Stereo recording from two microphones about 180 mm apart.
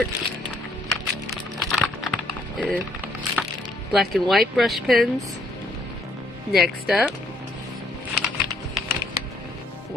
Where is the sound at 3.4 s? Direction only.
5° right (ahead or behind).